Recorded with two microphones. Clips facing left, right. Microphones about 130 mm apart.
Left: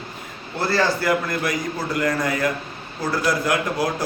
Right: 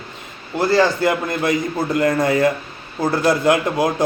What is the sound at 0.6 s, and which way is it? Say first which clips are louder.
A man's voice: right 5 dB; 20° right (ahead or behind).